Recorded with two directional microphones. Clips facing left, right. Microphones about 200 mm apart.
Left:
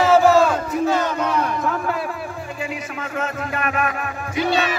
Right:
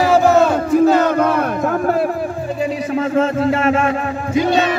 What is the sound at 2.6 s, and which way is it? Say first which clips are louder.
A man's voice: right 12 dB; 30° right (ahead or behind).